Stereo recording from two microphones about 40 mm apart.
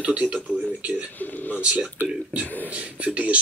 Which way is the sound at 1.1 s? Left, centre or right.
Left.